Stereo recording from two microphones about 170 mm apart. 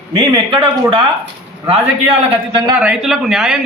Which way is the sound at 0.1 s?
30° right (ahead or behind).